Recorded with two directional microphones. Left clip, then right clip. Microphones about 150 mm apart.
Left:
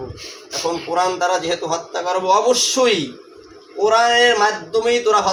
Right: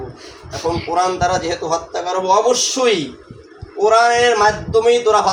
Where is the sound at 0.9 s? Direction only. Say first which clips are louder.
Right 1 dB; 20° left (ahead or behind).